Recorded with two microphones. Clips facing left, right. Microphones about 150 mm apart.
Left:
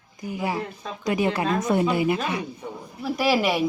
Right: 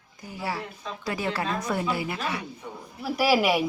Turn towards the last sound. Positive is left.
turn(degrees=-10)  # may be behind; listen again after turning